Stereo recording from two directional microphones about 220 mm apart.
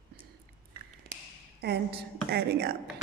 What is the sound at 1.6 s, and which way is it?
A woman's voice, 50° right (ahead or behind).